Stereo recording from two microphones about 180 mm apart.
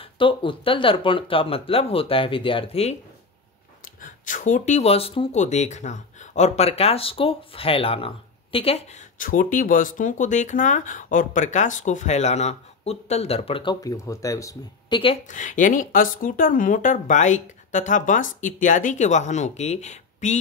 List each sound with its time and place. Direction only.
0.0 s speech: 30° left (ahead or behind)
4.0 s speech: 45° left (ahead or behind)
9.2 s speech: 50° left (ahead or behind); by 15.1 s 25° left (ahead or behind)
15.2 s speech: 45° left (ahead or behind)